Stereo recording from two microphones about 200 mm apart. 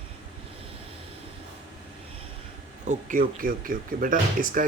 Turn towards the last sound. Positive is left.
turn(degrees=-45)  # may be behind; listen again after turning